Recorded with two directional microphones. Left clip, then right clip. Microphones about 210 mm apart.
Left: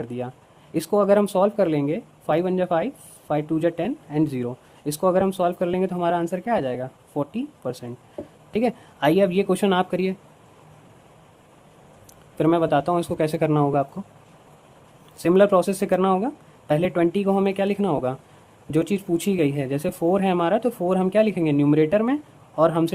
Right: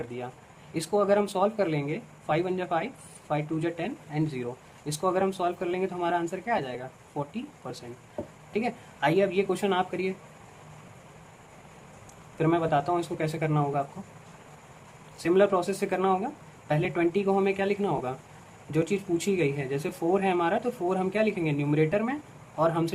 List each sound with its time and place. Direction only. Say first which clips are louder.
0.7 s speech: left 6 dB; 45° left (ahead or behind)
12.4 s speech: left 6 dB; 50° left (ahead or behind)
15.2 s speech: left 6 dB; 50° left (ahead or behind)